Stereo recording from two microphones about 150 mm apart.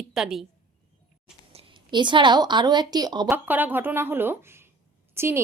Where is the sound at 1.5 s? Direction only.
35° right (ahead or behind).